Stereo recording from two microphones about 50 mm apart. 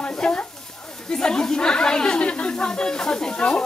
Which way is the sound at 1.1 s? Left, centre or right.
Centre.